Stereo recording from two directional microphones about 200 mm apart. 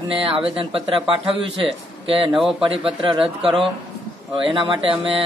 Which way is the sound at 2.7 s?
25° right (ahead or behind).